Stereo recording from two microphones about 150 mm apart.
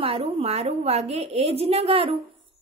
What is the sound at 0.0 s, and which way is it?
A woman's voice, 40° right (ahead or behind).